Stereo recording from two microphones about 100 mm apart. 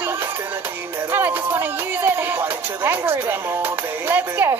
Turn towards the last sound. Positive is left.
turn(degrees=-25)  # may be behind; listen again after turning